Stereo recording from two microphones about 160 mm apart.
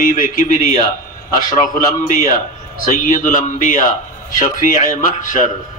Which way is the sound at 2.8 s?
55° left (ahead or behind).